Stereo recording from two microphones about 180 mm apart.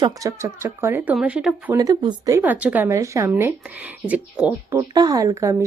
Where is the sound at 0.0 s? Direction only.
20° right (ahead or behind).